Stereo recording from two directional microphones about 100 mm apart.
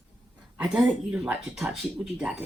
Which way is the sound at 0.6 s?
5° right (ahead or behind).